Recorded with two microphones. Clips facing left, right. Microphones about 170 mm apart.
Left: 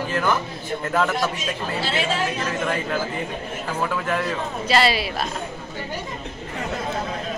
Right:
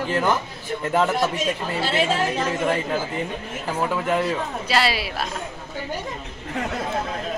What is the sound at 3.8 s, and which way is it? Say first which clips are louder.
Speech: right 2 dB; 20° right (ahead or behind).